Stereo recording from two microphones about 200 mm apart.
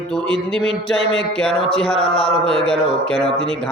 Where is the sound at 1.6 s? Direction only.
30° left (ahead or behind).